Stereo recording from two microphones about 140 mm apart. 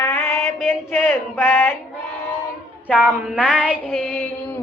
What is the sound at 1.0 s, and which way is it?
Child singing, 15° left (ahead or behind).